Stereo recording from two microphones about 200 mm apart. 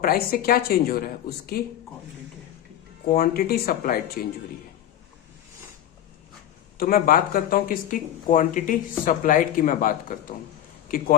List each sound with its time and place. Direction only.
0.0 s speech: 45° left (ahead or behind)
3.1 s speech: 50° left (ahead or behind)
6.7 s speech: 45° left (ahead or behind)